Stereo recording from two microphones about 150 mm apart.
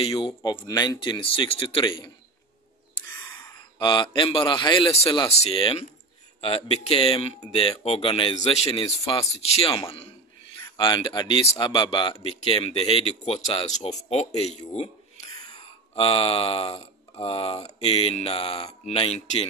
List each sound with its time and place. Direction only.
0.2 s speech: 30° left (ahead or behind)
3.3 s a man's voice: 30° left (ahead or behind)
5.3 s speech: 40° left (ahead or behind)
15.5 s speech: 40° left (ahead or behind)